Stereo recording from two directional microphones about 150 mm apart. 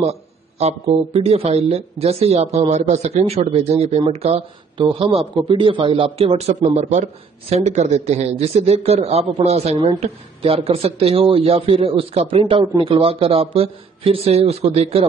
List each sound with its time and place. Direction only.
0.0 s speech: 45° right (ahead or behind)